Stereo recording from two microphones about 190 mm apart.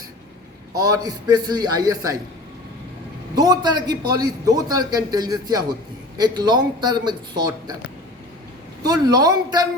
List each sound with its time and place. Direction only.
0.7 s a man's voice: 20° right (ahead or behind)
3.3 s a man's voice: 20° right (ahead or behind)
8.8 s a man's voice: 20° right (ahead or behind)